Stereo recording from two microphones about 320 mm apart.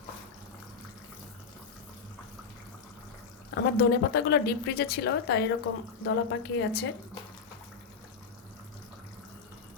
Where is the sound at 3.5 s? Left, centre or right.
Left.